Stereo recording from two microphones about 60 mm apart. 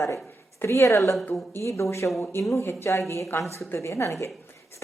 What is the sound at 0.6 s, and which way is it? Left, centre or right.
A woman's voice, left.